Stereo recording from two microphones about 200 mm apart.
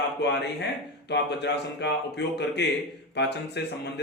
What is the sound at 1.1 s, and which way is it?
A man's voice, 60° left (ahead or behind).